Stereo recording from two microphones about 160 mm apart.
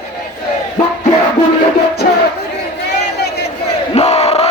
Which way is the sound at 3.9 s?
40° left (ahead or behind).